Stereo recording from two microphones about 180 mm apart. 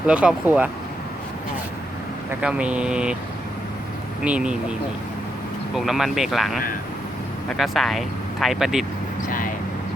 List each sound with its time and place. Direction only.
0.1 s speech: 5° right (ahead or behind)
2.4 s speech: 5° right (ahead or behind)
4.2 s speech: 5° right (ahead or behind)
5.7 s speech: centre (ahead or behind)
9.2 s vehicle: 50° left (ahead or behind)